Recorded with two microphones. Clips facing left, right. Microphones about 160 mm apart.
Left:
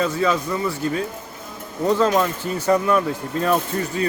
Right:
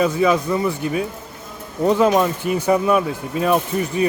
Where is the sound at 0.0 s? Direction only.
10° right (ahead or behind).